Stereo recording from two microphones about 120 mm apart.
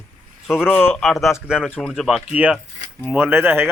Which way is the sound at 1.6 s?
10° left (ahead or behind).